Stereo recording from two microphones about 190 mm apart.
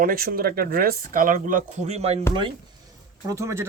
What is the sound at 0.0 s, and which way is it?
Speech, 50° right (ahead or behind).